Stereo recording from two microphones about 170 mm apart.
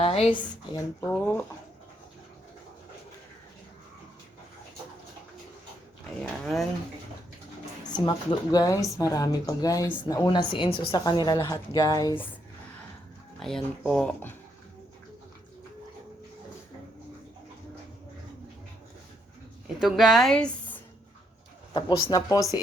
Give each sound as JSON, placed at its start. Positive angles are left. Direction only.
{"t": 0.0, "sound": "a woman's voice", "side_deg": 35}
{"t": 1.0, "sound": "speech", "side_deg": 15}
{"t": 6.4, "sound": "speech", "side_deg": 0}
{"t": 7.9, "sound": "speech", "side_deg": 25}
{"t": 13.4, "sound": "speech", "side_deg": 0}
{"t": 19.6, "sound": "a woman's voice", "side_deg": 0}
{"t": 21.7, "sound": "speech", "side_deg": 25}